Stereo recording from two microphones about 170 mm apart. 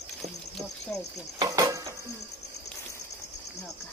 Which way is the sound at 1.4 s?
20° right (ahead or behind).